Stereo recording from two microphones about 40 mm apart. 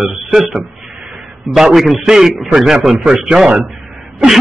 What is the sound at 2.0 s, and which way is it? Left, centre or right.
A man's voice, centre.